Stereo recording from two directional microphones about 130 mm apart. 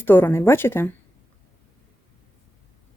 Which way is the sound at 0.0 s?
15° left (ahead or behind).